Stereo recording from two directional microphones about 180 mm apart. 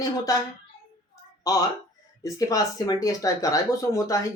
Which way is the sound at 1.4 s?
20° left (ahead or behind).